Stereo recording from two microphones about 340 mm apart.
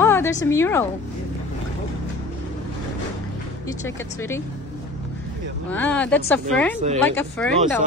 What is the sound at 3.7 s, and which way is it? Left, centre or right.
Speech, centre.